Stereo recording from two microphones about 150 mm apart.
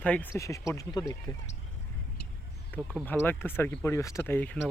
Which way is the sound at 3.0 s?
10° left (ahead or behind).